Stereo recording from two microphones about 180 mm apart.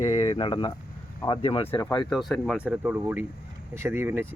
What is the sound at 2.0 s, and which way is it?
Speech, centre (ahead or behind).